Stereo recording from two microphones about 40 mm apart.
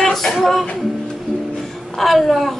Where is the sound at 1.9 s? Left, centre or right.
Centre.